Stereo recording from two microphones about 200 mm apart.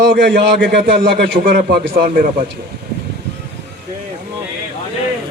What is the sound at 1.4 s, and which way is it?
A man's voice, 45° right (ahead or behind).